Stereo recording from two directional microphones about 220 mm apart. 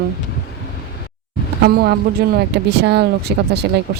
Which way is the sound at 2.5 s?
50° right (ahead or behind).